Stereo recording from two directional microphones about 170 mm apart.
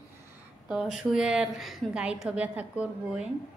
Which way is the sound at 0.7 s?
5° right (ahead or behind).